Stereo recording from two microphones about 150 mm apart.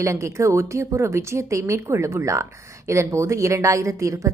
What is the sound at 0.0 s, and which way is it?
Speech, 20° right (ahead or behind).